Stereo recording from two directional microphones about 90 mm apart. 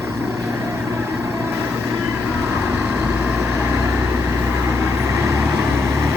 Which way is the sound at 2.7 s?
20° right (ahead or behind).